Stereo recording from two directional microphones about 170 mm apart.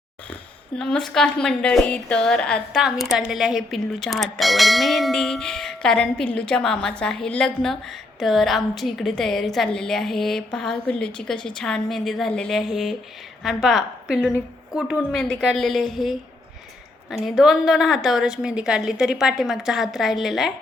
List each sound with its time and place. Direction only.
0.8 s a woman's voice: 5° left (ahead or behind)